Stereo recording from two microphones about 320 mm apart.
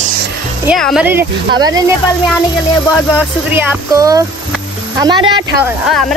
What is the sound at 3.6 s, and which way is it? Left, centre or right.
Speech, centre.